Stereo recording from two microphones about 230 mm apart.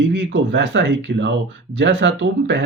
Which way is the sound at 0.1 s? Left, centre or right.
Right.